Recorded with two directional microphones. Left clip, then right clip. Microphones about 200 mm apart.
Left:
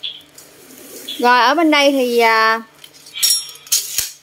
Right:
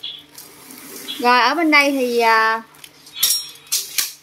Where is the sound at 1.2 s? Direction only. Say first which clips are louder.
Left 3 dB; 25° left (ahead or behind).